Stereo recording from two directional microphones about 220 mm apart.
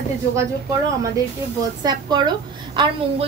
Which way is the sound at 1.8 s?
20° right (ahead or behind).